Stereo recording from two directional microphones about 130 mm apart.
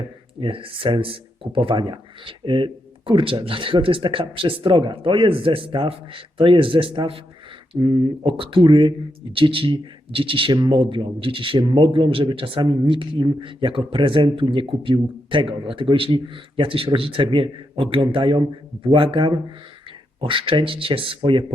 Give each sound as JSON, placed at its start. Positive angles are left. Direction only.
{"t": 0.3, "sound": "speech", "side_deg": -40}